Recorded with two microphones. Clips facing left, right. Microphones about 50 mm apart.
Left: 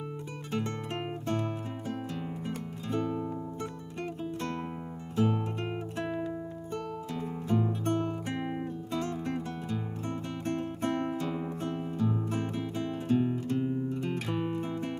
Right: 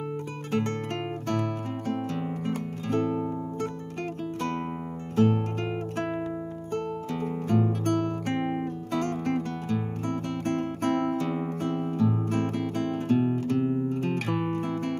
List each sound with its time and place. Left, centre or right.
0.5 s guitar: right
2.4 s music: right
5.1 s music: right
6.7 s music: right
7.8 s guitar: right
8.5 s music: right